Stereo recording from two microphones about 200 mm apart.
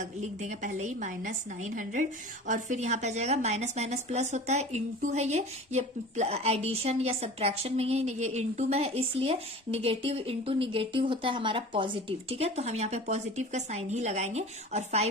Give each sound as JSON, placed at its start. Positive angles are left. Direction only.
{"t": 0.0, "sound": "a woman's voice", "side_deg": -40}